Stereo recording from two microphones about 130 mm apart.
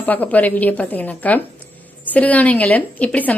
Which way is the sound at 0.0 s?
10° left (ahead or behind).